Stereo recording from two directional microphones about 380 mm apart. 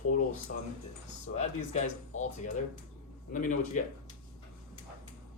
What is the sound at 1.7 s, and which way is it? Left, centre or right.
A man's voice, centre.